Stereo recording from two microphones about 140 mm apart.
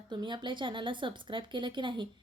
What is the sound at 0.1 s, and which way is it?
A woman's voice, 30° right (ahead or behind).